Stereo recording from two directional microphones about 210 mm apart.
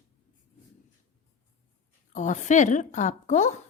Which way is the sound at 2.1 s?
35° left (ahead or behind).